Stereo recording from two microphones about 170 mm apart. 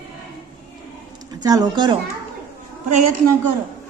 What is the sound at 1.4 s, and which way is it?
Speech, 20° right (ahead or behind).